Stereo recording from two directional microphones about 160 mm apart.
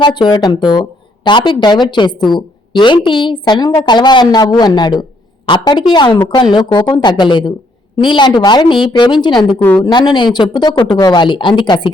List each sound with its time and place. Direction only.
0.0 s a woman's voice: 30° left (ahead or behind)
9.6 s a woman's voice: 10° left (ahead or behind)
9.8 s a woman's voice: 25° left (ahead or behind)